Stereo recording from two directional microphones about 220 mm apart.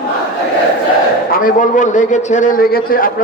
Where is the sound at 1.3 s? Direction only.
40° left (ahead or behind).